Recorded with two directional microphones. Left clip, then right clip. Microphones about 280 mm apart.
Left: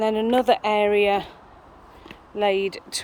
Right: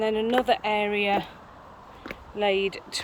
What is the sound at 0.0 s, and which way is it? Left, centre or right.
Speech, centre.